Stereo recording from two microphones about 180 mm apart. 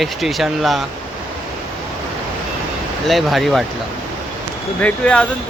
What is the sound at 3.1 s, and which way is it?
Speech, centre (ahead or behind).